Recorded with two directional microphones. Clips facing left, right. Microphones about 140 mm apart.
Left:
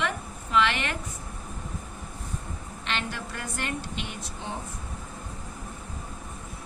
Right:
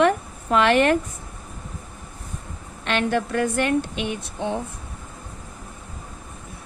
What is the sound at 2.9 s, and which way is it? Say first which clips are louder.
A woman's voice: right 11 dB; 60° right (ahead or behind).